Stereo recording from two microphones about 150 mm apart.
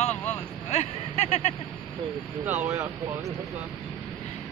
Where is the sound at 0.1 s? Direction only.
15° left (ahead or behind).